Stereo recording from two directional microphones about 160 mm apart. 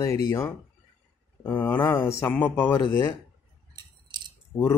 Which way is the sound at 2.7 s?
25° left (ahead or behind).